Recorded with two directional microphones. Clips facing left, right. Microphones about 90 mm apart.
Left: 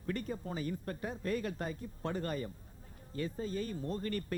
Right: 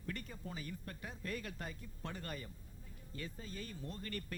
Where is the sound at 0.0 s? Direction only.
35° left (ahead or behind).